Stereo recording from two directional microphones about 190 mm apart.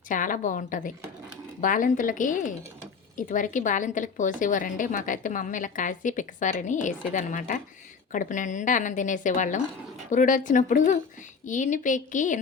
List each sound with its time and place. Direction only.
0.1 s a woman's voice: 45° left (ahead or behind)